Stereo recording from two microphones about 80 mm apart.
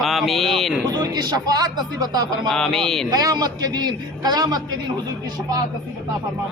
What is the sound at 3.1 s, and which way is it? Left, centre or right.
Speech, right.